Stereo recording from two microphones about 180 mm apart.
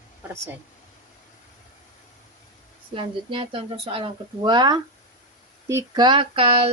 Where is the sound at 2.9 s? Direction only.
30° right (ahead or behind).